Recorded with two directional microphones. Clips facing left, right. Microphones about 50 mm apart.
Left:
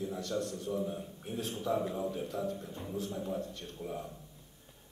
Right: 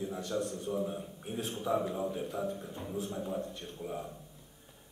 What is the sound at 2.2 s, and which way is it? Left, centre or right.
Speech, centre.